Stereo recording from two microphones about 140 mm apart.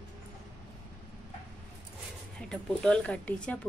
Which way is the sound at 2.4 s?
5° left (ahead or behind).